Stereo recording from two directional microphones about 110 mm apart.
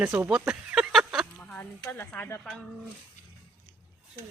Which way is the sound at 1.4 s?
10° left (ahead or behind).